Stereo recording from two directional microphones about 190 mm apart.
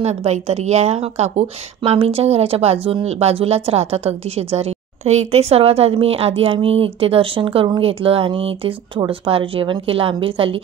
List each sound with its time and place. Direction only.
0.0 s a woman's voice: 35° right (ahead or behind)